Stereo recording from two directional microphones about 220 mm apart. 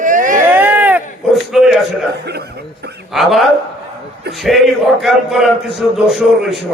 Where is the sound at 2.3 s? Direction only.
50° right (ahead or behind).